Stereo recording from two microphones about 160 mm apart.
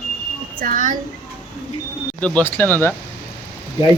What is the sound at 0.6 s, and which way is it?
Speech, 55° right (ahead or behind).